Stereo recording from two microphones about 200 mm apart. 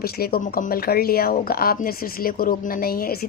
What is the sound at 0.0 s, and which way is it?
Speech, 50° left (ahead or behind).